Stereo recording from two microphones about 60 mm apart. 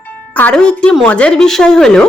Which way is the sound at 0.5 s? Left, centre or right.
Centre.